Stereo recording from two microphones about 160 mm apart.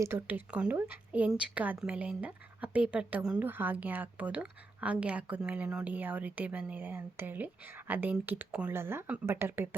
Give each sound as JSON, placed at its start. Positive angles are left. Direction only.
{"t": 0.0, "sound": "a woman's voice", "side_deg": -15}